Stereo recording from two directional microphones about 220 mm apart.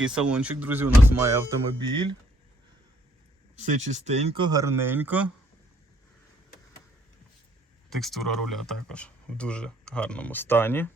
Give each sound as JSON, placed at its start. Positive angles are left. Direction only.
{"t": 0.0, "sound": "speech", "side_deg": -5}
{"t": 3.5, "sound": "speech", "side_deg": -30}
{"t": 4.4, "sound": "speech", "side_deg": -15}
{"t": 7.9, "sound": "speech", "side_deg": 0}